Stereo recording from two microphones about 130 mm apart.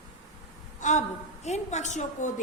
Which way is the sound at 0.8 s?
70° left (ahead or behind).